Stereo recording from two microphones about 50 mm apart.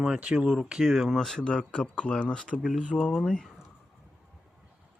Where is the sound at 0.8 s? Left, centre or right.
Centre.